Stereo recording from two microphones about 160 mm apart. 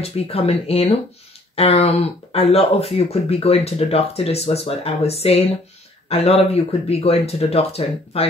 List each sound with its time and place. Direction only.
0.0 s speech: 40° left (ahead or behind)